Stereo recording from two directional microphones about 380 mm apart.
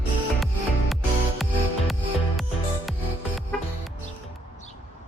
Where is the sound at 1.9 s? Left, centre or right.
Centre.